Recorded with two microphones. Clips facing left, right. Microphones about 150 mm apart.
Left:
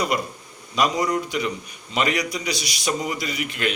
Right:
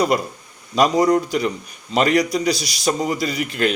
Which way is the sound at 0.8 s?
35° right (ahead or behind).